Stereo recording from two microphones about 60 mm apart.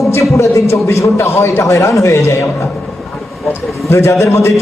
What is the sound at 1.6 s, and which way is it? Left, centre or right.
Speech, left.